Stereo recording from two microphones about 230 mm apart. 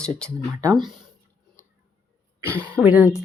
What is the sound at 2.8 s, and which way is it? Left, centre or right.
Speech, centre.